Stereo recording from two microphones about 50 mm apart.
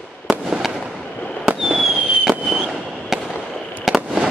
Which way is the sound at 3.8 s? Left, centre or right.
Centre.